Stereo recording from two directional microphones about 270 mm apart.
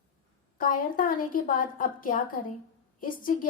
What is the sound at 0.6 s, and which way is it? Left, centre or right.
A woman's voice, left.